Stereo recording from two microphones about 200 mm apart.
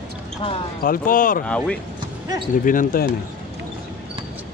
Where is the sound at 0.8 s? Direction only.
45° left (ahead or behind).